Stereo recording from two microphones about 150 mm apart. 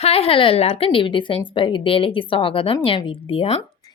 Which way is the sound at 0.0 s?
40° left (ahead or behind).